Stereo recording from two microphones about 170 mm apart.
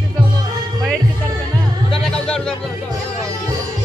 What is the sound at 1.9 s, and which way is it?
Music, 5° left (ahead or behind).